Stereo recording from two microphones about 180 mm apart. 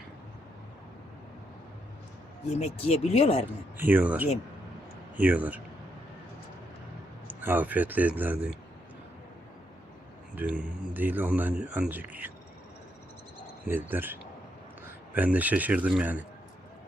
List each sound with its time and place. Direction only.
2.5 s speech: 35° left (ahead or behind)
3.8 s a man's voice: 10° right (ahead or behind)
7.3 s a man's voice: 10° right (ahead or behind)
10.3 s a man's voice: 5° right (ahead or behind)
13.7 s a man's voice: 10° right (ahead or behind)